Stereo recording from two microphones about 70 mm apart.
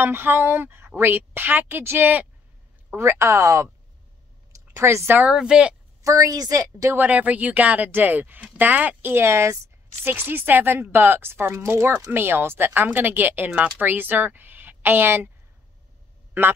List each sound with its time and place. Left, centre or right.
0.0 s a woman's voice: right
3.0 s speech: right
4.7 s a woman's voice: right
5.2 s speech: centre
6.0 s a woman's voice: right
7.0 s a woman's voice: right
10.0 s a woman's voice: right